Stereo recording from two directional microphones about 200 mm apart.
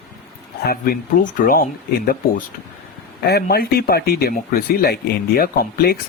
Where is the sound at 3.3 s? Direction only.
50° left (ahead or behind).